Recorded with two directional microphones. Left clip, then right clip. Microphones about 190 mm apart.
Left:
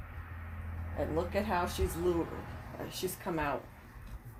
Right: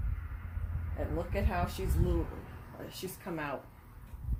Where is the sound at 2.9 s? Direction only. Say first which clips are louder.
Left 4 dB; 20° left (ahead or behind).